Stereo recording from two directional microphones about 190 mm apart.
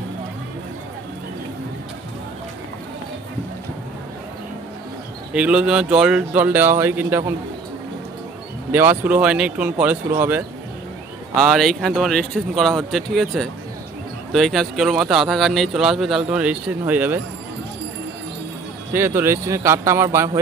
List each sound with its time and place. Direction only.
5.3 s speech: 5° right (ahead or behind)
8.7 s speech: 10° right (ahead or behind)
11.4 s speech: centre (ahead or behind)
18.9 s speech: 10° right (ahead or behind)